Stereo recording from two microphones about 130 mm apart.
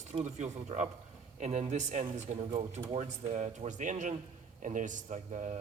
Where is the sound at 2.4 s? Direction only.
50° right (ahead or behind).